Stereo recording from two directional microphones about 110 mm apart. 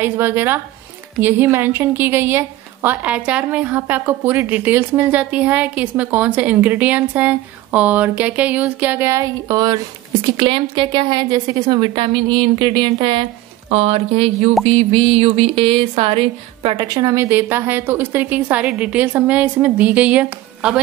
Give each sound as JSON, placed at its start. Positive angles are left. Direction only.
{"t": 0.0, "sound": "a woman's voice", "side_deg": -20}
{"t": 10.2, "sound": "a woman's voice", "side_deg": -45}
{"t": 13.7, "sound": "speech", "side_deg": -70}
{"t": 16.8, "sound": "a woman's voice", "side_deg": -35}
{"t": 17.1, "sound": "a woman's voice", "side_deg": -20}